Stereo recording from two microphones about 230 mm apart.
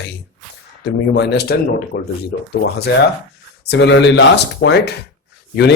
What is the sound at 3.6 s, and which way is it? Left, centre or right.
Speech, left.